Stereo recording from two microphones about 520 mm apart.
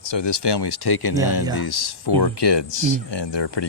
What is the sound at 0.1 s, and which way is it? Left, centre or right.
Speech, left.